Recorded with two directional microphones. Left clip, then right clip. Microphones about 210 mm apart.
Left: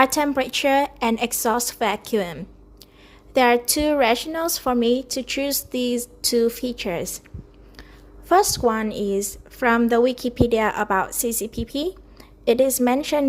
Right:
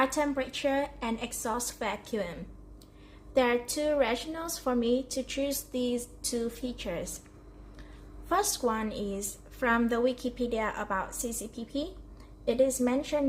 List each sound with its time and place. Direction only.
0.0 s a woman's voice: 50° left (ahead or behind)
8.3 s a woman's voice: 40° left (ahead or behind)